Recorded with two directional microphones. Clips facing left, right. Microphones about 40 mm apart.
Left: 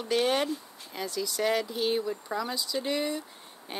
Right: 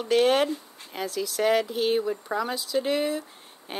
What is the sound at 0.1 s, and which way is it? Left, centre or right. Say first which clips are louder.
Speech: right 5 dB; centre.